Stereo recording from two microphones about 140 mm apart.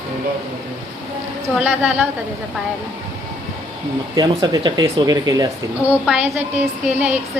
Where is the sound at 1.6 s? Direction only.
10° right (ahead or behind).